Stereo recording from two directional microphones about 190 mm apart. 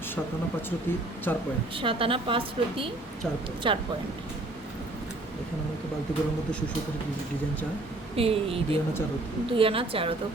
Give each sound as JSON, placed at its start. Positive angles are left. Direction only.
{"t": 1.3, "sound": "speech", "side_deg": 10}
{"t": 1.7, "sound": "a woman's voice", "side_deg": -30}
{"t": 8.1, "sound": "a woman's voice", "side_deg": -30}